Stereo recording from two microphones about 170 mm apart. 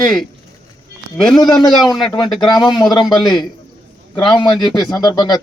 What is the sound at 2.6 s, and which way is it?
Speech, 25° left (ahead or behind).